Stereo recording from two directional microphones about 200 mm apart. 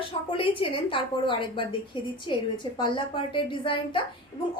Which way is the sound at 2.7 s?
25° left (ahead or behind).